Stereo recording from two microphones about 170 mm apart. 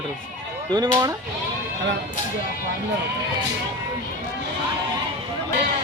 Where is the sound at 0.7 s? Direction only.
25° right (ahead or behind).